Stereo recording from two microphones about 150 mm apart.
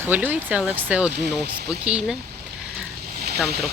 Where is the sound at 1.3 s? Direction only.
90° right.